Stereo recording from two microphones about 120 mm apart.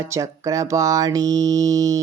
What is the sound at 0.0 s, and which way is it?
A woman's voice, 25° right (ahead or behind).